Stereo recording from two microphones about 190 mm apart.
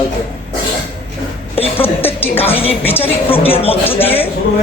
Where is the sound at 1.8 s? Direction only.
10° left (ahead or behind).